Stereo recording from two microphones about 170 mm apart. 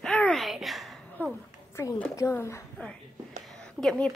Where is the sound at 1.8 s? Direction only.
10° left (ahead or behind).